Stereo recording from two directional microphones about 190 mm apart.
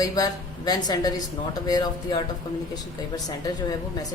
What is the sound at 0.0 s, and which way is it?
A woman's voice, 20° left (ahead or behind).